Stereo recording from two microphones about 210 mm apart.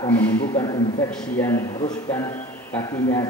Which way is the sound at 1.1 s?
5° left (ahead or behind).